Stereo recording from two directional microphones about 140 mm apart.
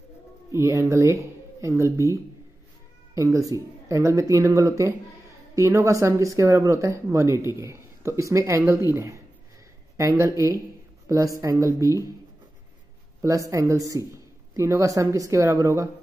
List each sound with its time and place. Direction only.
0.5 s speech: 20° right (ahead or behind)
3.2 s speech: 20° right (ahead or behind)
13.2 s speech: 20° right (ahead or behind)